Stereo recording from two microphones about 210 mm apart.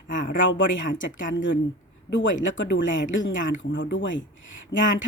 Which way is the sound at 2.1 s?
65° left (ahead or behind).